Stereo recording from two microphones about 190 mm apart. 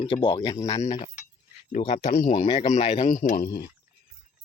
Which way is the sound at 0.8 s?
40° left (ahead or behind).